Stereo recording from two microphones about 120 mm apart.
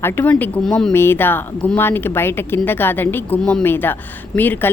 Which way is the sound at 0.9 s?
20° left (ahead or behind).